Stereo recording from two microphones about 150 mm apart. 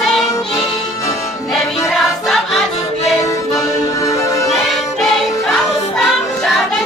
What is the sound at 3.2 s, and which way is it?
Music, 20° left (ahead or behind).